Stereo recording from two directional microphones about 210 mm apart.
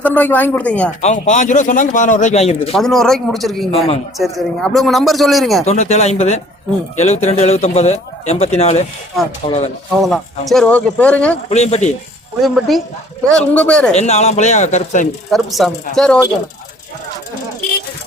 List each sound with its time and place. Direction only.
0.0 s speech: 10° left (ahead or behind)
1.0 s speech: 35° left (ahead or behind)
2.7 s a man's voice: centre (ahead or behind)
5.6 s speech: 30° left (ahead or behind)
10.0 s a man's voice: centre (ahead or behind)
11.4 s speech: 30° left (ahead or behind)
12.4 s a man's voice: centre (ahead or behind)
13.9 s speech: 30° left (ahead or behind)
15.3 s a man's voice: centre (ahead or behind)